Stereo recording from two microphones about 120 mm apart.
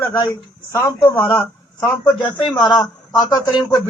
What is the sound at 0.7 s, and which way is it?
A man's voice, 25° left (ahead or behind).